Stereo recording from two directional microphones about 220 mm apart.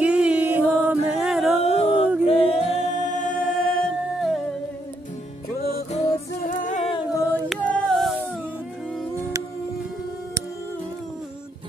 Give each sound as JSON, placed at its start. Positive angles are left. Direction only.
{"t": 0.0, "sound": "music", "side_deg": -5}
{"t": 1.6, "sound": "a sound", "side_deg": 25}
{"t": 2.2, "sound": "a capella", "side_deg": 25}
{"t": 5.9, "sound": "music", "side_deg": 30}
{"t": 7.4, "sound": "music", "side_deg": 5}